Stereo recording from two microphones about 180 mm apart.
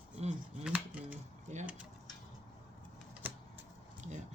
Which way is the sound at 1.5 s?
40° right (ahead or behind).